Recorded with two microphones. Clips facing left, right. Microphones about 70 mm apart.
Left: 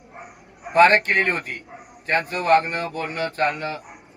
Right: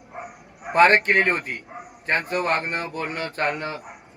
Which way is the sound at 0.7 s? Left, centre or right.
Right.